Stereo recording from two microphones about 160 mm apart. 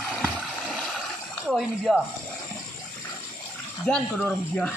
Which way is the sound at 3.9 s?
5° left (ahead or behind).